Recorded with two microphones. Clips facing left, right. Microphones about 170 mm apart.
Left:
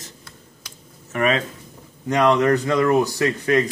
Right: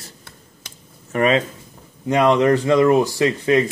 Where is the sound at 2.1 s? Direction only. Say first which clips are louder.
Right 2 dB; 25° right (ahead or behind).